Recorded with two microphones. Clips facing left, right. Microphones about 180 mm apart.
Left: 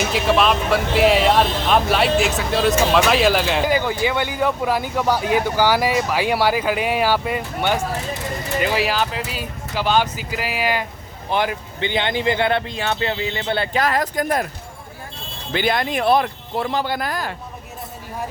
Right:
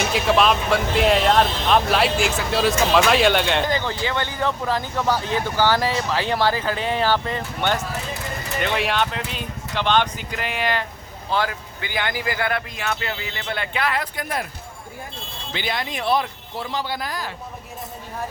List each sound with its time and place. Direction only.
0.0 s speech: centre (ahead or behind)
11.3 s speech: 20° left (ahead or behind); by 14.4 s 45° left (ahead or behind)
15.5 s speech: 50° left (ahead or behind)